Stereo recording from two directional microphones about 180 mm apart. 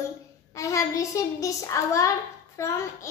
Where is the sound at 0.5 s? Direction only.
15° left (ahead or behind).